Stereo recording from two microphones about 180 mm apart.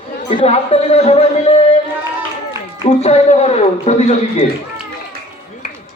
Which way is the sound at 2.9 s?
35° left (ahead or behind).